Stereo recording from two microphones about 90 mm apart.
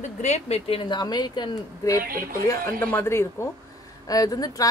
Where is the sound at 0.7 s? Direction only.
90° left.